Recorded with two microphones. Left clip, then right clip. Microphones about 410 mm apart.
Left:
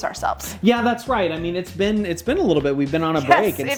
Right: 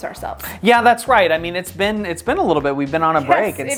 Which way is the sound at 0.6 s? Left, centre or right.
Right.